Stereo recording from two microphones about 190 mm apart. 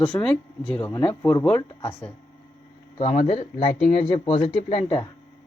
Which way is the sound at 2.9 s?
35° left (ahead or behind).